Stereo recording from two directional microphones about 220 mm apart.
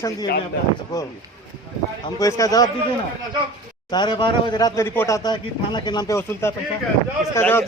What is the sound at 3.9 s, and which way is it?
A man's voice, 20° left (ahead or behind).